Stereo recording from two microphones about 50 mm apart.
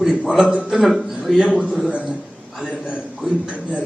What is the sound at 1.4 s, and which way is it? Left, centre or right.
Speech, centre.